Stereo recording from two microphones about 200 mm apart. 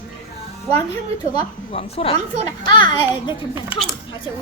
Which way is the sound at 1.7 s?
30° left (ahead or behind).